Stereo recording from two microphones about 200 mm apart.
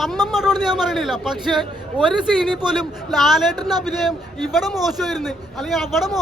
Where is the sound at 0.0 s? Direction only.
Centre (ahead or behind).